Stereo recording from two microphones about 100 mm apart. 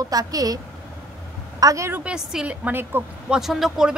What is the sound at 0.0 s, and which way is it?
Speech, 40° right (ahead or behind).